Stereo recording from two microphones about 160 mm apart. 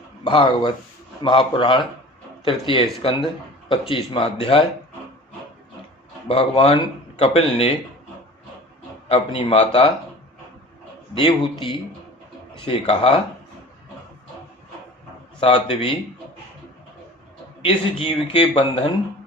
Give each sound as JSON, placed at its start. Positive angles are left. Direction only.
{"t": 0.3, "sound": "speech", "side_deg": 30}
{"t": 6.2, "sound": "speech", "side_deg": 35}
{"t": 9.0, "sound": "speech", "side_deg": 35}
{"t": 12.5, "sound": "speech", "side_deg": 35}
{"t": 15.4, "sound": "speech", "side_deg": 35}
{"t": 17.6, "sound": "speech", "side_deg": 35}